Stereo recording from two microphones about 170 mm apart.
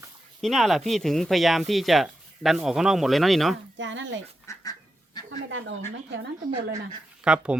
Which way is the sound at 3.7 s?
90° right.